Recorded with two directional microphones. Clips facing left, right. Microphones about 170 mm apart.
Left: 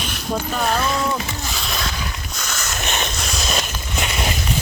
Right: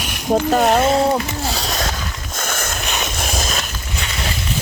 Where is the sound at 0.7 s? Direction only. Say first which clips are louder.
Right 5 dB; 30° right (ahead or behind).